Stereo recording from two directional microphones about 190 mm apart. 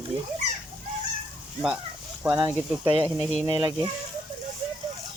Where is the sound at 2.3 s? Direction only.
10° right (ahead or behind).